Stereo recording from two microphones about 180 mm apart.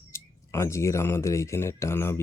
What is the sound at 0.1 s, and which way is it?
Speech, 15° left (ahead or behind).